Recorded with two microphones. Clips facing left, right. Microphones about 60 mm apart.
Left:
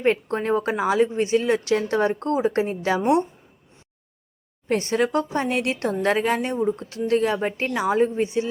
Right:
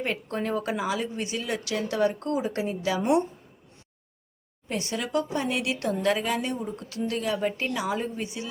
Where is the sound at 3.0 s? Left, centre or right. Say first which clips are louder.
Left 3 dB; left.